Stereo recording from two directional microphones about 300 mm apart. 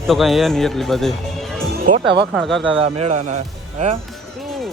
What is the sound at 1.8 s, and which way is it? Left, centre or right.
Speech, right.